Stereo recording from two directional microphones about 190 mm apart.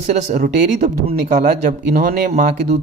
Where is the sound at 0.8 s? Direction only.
45° right (ahead or behind).